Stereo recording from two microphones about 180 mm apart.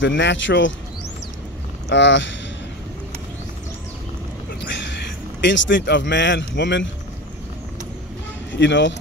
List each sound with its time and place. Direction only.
0.0 s speech: 85° left
1.9 s speech: 80° left
4.6 s speech: 80° left
8.5 s speech: 85° left